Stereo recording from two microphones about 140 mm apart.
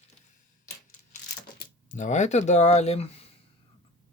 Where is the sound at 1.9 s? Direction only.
60° left (ahead or behind).